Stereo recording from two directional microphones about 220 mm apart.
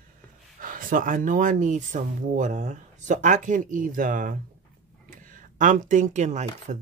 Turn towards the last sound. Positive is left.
turn(degrees=-30)  # may be behind; listen again after turning